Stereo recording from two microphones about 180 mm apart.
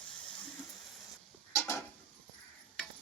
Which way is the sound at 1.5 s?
15° left (ahead or behind).